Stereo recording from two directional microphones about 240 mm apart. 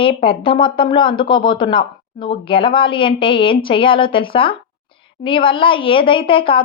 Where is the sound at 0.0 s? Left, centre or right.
Left.